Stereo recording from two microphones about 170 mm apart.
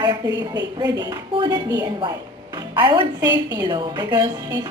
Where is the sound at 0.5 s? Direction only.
25° right (ahead or behind).